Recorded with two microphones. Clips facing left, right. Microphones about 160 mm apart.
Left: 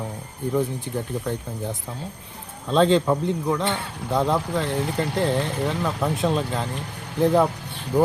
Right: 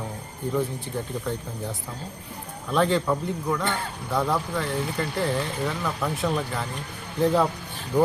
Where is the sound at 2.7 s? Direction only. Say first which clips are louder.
Left 4 dB; 20° left (ahead or behind).